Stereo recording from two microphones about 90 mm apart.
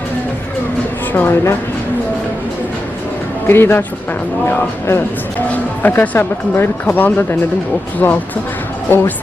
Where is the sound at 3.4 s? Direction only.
25° left (ahead or behind).